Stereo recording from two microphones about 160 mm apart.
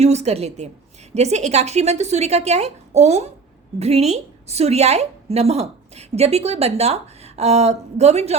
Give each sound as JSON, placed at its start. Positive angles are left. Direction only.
{"t": 0.0, "sound": "a woman's voice", "side_deg": -45}